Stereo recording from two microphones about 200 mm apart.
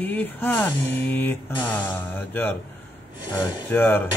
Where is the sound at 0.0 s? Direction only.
10° left (ahead or behind).